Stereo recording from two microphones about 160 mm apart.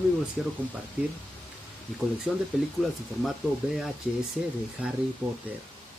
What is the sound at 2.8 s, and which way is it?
Speech, centre (ahead or behind).